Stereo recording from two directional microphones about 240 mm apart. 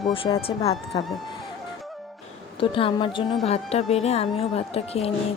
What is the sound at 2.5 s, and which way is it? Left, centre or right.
Speech, left.